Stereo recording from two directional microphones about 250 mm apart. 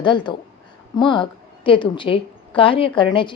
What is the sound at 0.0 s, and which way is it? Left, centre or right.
A woman's voice, centre.